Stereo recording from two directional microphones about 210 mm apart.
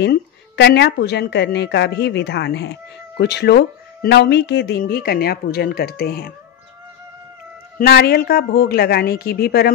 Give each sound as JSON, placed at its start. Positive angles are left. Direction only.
{"t": 0.0, "sound": "a woman's voice", "side_deg": 55}
{"t": 7.8, "sound": "a woman's voice", "side_deg": 50}